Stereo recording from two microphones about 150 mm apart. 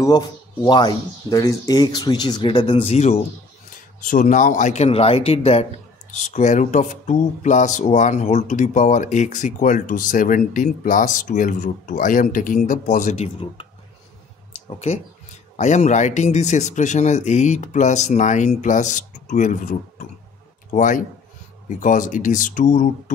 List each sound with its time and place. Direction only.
0.0 s speech: 25° left (ahead or behind); by 3.3 s 45° left (ahead or behind)
4.1 s speech: 60° left (ahead or behind)
14.7 s speech: 45° left (ahead or behind)
20.7 s speech: 55° left (ahead or behind)